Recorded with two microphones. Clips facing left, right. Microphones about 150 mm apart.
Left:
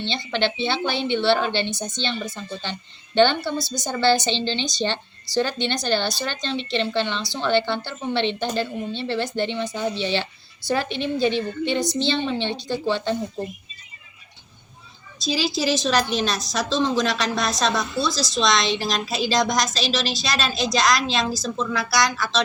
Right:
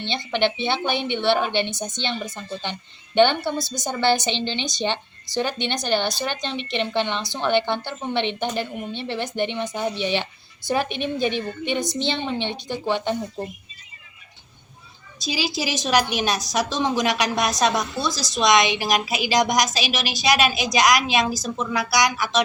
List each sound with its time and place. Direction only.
0.1 s a woman's voice: 15° right (ahead or behind)
15.2 s a woman's voice: 10° right (ahead or behind)